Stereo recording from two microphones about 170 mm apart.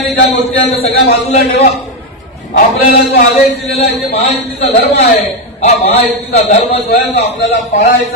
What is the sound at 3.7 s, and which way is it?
Speech, 40° left (ahead or behind).